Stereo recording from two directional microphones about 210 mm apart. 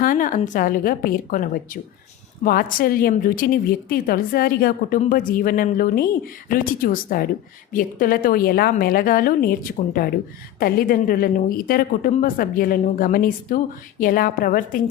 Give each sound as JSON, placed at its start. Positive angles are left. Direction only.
{"t": 0.0, "sound": "a woman's voice", "side_deg": 40}